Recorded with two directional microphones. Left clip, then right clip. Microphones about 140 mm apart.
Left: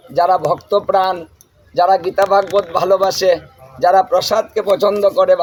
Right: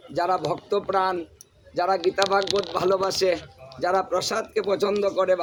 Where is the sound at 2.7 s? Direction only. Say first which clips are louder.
Left 10 dB; 30° right (ahead or behind).